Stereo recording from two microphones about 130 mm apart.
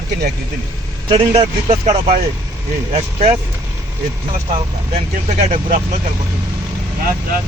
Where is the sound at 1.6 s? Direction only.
60° right (ahead or behind).